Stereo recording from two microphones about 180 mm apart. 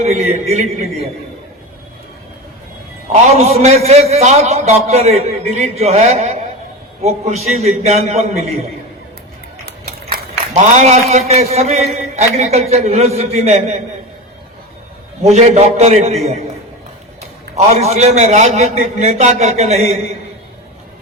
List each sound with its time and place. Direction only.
0.0 s a man's voice: 35° right (ahead or behind)
3.1 s a man's voice: 40° right (ahead or behind)
10.5 s a man's voice: 40° right (ahead or behind)
15.2 s a man's voice: 40° right (ahead or behind)
17.7 s a man's voice: 35° right (ahead or behind)